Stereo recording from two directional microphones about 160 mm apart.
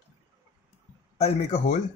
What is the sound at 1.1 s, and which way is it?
Speech, 40° left (ahead or behind).